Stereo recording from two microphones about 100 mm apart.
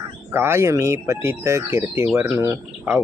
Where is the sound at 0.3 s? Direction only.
25° right (ahead or behind).